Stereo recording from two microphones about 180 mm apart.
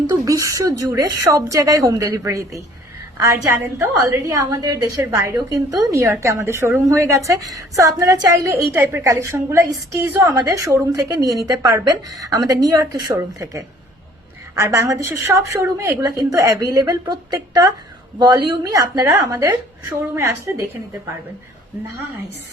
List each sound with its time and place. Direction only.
0.1 s a woman's voice: 20° right (ahead or behind)